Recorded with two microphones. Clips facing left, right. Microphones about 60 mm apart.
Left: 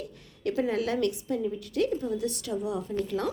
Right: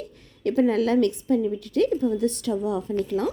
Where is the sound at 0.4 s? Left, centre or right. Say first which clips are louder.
Right 7 dB; right.